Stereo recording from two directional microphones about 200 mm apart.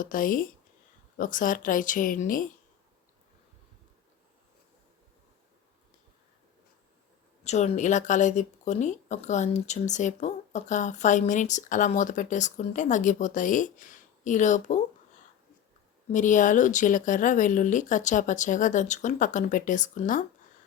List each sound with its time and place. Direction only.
0.0 s speech: 45° left (ahead or behind)
7.4 s speech: 35° left (ahead or behind)
16.1 s speech: 40° left (ahead or behind)